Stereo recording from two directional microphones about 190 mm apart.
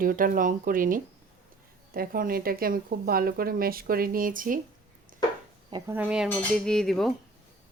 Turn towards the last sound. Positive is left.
turn(degrees=0)  # may be behind; listen again after turning